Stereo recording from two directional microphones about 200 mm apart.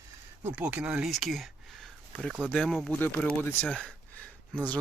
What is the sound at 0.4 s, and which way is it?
Speech, 10° right (ahead or behind).